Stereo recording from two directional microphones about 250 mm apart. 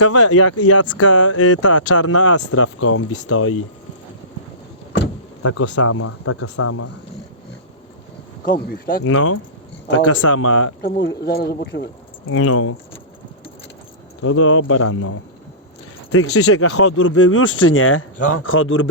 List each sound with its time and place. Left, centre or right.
0.0 s speech: left
5.4 s speech: left
8.4 s speech: left
9.0 s speech: left
9.9 s speech: left
10.8 s speech: left
12.3 s speech: left
14.2 s speech: left
16.1 s speech: left